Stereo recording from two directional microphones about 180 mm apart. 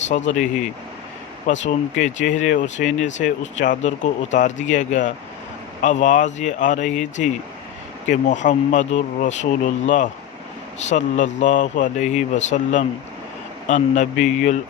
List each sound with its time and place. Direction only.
0.1 s speech: 40° left (ahead or behind)
1.5 s speech: 40° left (ahead or behind)